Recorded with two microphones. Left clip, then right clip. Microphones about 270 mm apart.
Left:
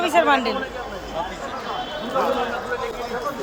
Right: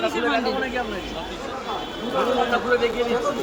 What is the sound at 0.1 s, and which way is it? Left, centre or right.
Speech, centre.